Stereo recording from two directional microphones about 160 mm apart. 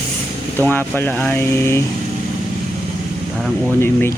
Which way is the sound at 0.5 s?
15° left (ahead or behind).